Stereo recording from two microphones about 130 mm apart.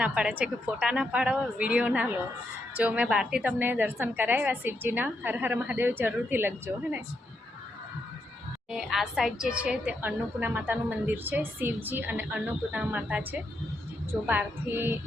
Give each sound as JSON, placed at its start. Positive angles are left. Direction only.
{"t": 0.0, "sound": "a woman's voice", "side_deg": -10}
{"t": 8.7, "sound": "a woman's voice", "side_deg": 0}
{"t": 14.3, "sound": "a woman's voice", "side_deg": -15}